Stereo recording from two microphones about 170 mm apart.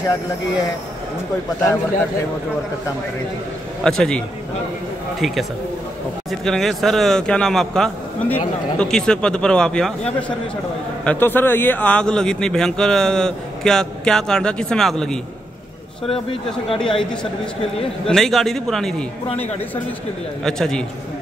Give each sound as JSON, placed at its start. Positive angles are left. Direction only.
{"t": 3.8, "sound": "speech", "side_deg": 5}
{"t": 5.2, "sound": "speech", "side_deg": 0}
{"t": 11.1, "sound": "speech", "side_deg": 10}
{"t": 16.1, "sound": "speech", "side_deg": 35}
{"t": 18.0, "sound": "speech", "side_deg": 0}
{"t": 20.4, "sound": "speech", "side_deg": 5}